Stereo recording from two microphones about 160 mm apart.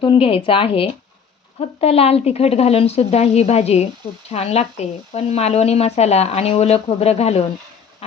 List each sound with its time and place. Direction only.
0.0 s speech: 35° left (ahead or behind)